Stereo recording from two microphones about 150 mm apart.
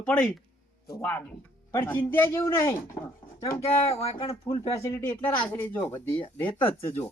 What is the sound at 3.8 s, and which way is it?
Speech, 40° left (ahead or behind).